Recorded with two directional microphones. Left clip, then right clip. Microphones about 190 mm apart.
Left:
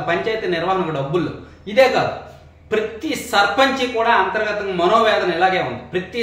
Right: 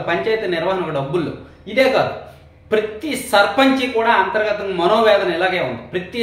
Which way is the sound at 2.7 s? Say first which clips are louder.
Right 2 dB; 20° right (ahead or behind).